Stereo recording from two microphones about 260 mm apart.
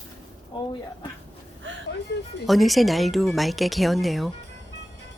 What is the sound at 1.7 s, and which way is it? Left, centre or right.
Vehicle, right.